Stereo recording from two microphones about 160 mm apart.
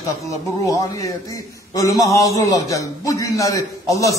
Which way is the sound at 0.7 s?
20° left (ahead or behind).